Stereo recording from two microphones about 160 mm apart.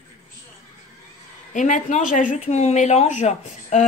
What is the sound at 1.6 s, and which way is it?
Speech, 50° left (ahead or behind).